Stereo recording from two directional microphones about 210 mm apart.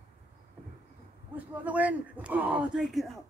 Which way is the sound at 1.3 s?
5° right (ahead or behind).